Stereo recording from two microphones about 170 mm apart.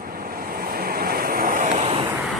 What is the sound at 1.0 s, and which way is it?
Vehicle, 60° right (ahead or behind).